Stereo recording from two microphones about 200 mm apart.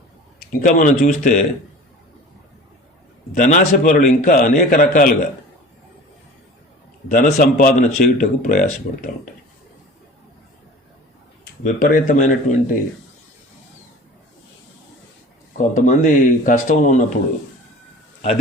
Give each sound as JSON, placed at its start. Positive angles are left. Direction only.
{"t": 0.5, "sound": "a man's voice", "side_deg": 40}
{"t": 3.3, "sound": "a man's voice", "side_deg": 40}
{"t": 7.1, "sound": "a man's voice", "side_deg": 45}
{"t": 11.6, "sound": "a man's voice", "side_deg": 45}
{"t": 15.5, "sound": "a man's voice", "side_deg": 35}